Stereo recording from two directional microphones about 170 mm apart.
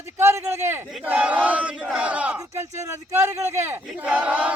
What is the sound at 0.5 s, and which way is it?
A man's voice, 15° right (ahead or behind).